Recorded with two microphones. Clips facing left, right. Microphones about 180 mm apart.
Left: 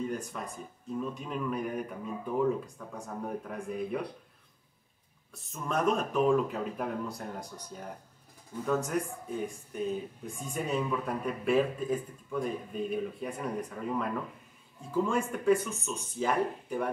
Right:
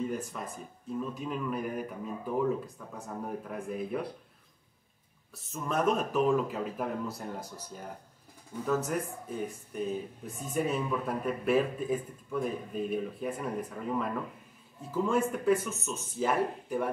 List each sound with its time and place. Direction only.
0.3 s a man's voice: centre (ahead or behind)
5.5 s a man's voice: 5° right (ahead or behind)
15.0 s a man's voice: 5° right (ahead or behind)